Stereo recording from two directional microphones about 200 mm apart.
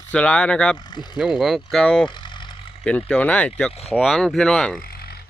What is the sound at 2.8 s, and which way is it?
Speech, 5° left (ahead or behind).